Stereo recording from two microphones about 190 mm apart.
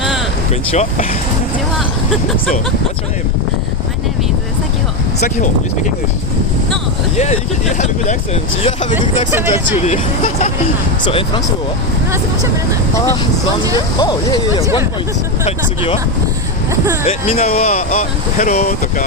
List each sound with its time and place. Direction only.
0.7 s speech: 35° left (ahead or behind)
7.2 s speech: 35° left (ahead or behind)
9.3 s speech: 10° right (ahead or behind)
9.8 s speech: 40° left (ahead or behind)
11.0 s speech: 30° left (ahead or behind)
13.7 s speech: 20° left (ahead or behind)
14.6 s speech: 15° right (ahead or behind)
15.4 s speech: 30° left (ahead or behind)
17.1 s speech: 30° left (ahead or behind)